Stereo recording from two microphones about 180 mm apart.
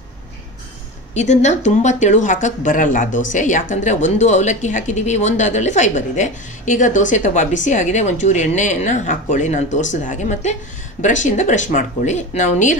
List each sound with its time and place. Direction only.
1.1 s speech: 40° left (ahead or behind)